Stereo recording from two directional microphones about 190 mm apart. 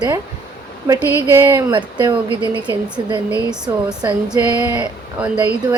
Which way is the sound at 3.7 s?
15° right (ahead or behind).